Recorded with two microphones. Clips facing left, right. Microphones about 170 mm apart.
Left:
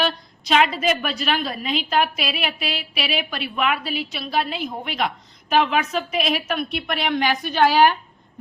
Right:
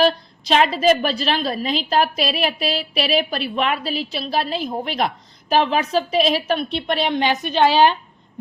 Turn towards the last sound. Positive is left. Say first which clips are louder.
# right 1 dB
turn(degrees=-20)  # may be behind; listen again after turning